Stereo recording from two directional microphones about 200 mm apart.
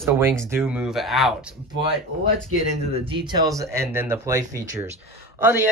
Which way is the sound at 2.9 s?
25° right (ahead or behind).